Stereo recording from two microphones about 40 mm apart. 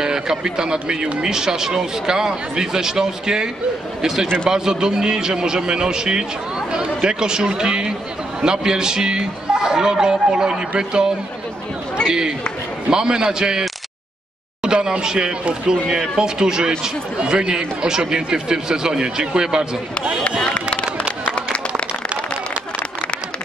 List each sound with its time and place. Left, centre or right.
0.0 s a man's voice: centre
12.9 s speech: centre